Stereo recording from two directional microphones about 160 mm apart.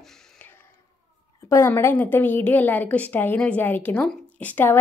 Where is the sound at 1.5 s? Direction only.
15° left (ahead or behind).